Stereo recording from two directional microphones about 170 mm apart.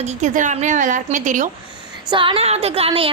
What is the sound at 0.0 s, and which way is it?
A woman's voice, 45° right (ahead or behind).